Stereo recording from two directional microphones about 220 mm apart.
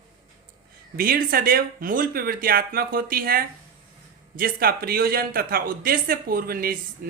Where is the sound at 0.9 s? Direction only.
40° right (ahead or behind).